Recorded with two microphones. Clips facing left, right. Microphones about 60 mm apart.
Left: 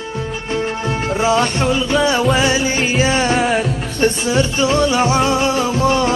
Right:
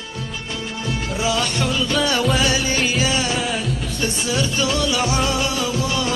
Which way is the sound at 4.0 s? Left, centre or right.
Left.